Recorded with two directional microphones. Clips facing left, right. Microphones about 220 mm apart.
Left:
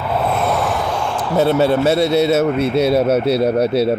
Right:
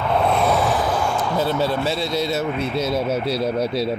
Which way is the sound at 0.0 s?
5° left (ahead or behind).